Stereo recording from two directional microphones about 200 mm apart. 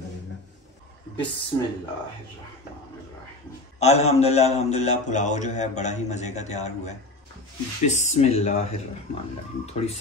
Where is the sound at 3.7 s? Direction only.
35° left (ahead or behind).